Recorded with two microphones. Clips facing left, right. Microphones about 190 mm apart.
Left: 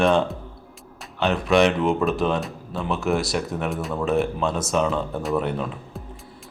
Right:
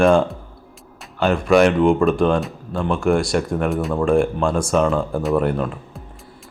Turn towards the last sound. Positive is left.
turn(degrees=0)  # may be behind; listen again after turning